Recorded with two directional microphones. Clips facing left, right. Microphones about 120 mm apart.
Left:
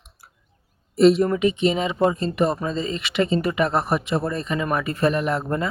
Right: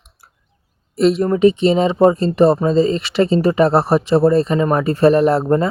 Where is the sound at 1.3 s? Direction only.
30° right (ahead or behind).